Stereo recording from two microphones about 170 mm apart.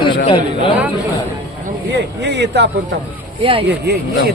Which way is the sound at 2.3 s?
90° right.